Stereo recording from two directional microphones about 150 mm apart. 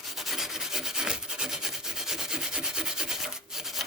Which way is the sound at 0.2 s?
Centre (ahead or behind).